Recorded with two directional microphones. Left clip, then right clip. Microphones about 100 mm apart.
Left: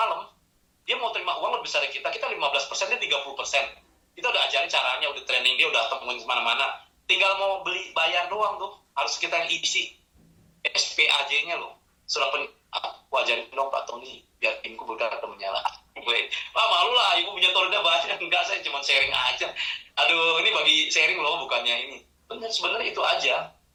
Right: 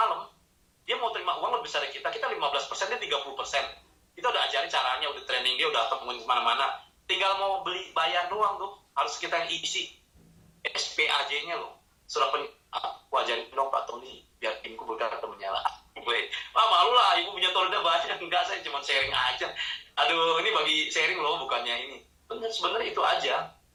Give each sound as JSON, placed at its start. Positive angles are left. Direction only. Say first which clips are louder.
{"t": 0.0, "sound": "a sound", "louder": "left 1 dB", "side_deg": 10}
{"t": 0.9, "sound": "a man's voice", "louder": "left 2 dB", "side_deg": 15}
{"t": 13.6, "sound": "a man's voice", "louder": "left 1 dB", "side_deg": 10}
{"t": 14.3, "sound": "speech", "louder": "left 6 dB", "side_deg": 25}
{"t": 14.8, "sound": "a man's voice", "louder": "left 3 dB", "side_deg": 15}
{"t": 21.0, "sound": "a man's voice", "louder": "left 4 dB", "side_deg": 25}
{"t": 21.3, "sound": "a man's voice", "louder": "left 4 dB", "side_deg": 15}